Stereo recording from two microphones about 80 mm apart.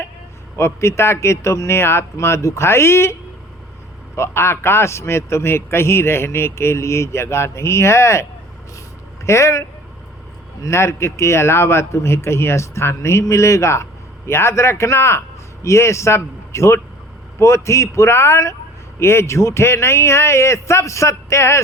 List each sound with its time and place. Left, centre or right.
0.5 s a man's voice: left